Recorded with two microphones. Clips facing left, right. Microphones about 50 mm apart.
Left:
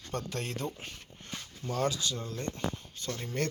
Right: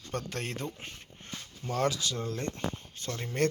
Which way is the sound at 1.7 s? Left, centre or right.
Right.